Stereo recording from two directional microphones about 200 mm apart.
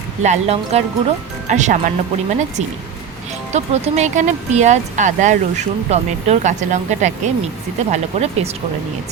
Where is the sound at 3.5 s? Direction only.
35° right (ahead or behind).